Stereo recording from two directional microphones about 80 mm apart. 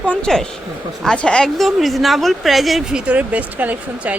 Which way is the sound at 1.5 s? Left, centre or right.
Centre.